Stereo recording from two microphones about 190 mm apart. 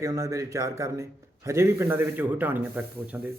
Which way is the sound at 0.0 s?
15° right (ahead or behind).